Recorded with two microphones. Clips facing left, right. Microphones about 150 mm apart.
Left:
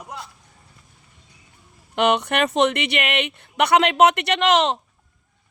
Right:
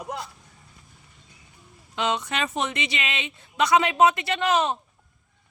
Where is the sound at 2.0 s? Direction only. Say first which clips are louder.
Left 7 dB; 65° left (ahead or behind); by 4.8 s 85° left.